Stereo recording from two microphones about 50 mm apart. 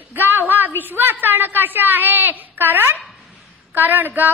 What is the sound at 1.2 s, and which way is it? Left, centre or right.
A woman's voice, right.